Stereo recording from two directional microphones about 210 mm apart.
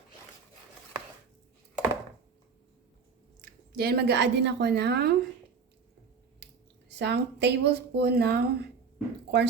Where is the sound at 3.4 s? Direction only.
45° right (ahead or behind).